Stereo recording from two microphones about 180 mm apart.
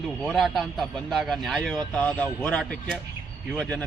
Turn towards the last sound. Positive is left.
turn(degrees=5)  # may be behind; listen again after turning